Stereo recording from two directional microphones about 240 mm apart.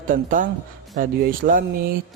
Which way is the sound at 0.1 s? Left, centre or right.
Right.